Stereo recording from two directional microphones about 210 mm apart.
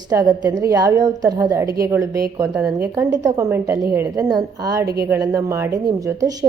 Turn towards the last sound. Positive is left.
turn(degrees=-15)  # may be behind; listen again after turning